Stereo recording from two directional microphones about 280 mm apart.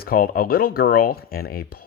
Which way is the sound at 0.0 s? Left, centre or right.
Left.